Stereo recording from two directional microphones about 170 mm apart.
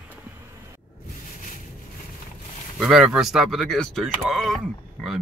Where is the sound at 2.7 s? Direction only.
5° right (ahead or behind).